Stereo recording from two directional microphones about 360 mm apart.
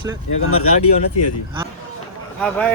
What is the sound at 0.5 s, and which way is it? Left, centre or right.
Speech, left.